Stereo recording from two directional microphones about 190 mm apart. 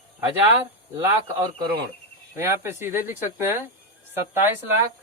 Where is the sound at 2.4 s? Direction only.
15° right (ahead or behind).